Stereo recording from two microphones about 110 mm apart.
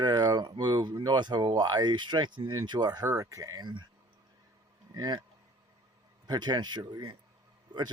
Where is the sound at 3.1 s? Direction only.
30° right (ahead or behind).